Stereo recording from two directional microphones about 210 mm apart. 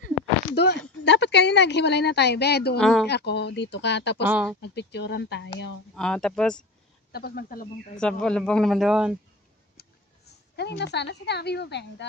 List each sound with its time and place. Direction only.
0.6 s speech: 55° left (ahead or behind)
2.8 s speech: centre (ahead or behind)
3.1 s speech: 55° left (ahead or behind)
4.3 s speech: 5° right (ahead or behind)
4.6 s speech: 55° left (ahead or behind)
5.9 s speech: 5° left (ahead or behind)
7.1 s speech: 50° left (ahead or behind)
8.0 s speech: 5° left (ahead or behind)
9.8 s a woman's voice: 50° left (ahead or behind)